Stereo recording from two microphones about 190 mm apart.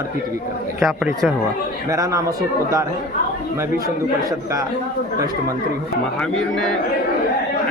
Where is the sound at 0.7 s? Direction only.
Centre (ahead or behind).